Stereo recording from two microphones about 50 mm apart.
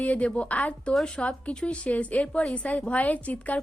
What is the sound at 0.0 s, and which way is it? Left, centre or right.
A woman's voice, left.